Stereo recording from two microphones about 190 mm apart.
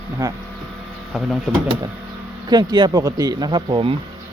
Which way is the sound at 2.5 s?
20° right (ahead or behind).